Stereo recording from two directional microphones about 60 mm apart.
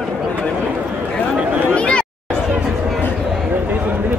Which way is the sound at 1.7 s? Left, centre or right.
Centre.